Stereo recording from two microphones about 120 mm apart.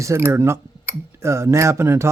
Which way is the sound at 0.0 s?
25° right (ahead or behind).